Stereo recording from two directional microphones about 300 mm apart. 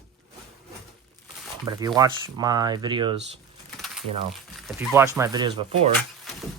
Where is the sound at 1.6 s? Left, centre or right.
Centre.